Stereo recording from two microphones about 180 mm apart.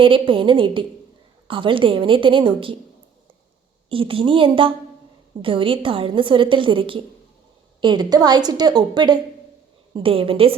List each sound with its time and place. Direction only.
0.0 s a woman's voice: 30° right (ahead or behind)
3.8 s a woman's voice: 30° right (ahead or behind)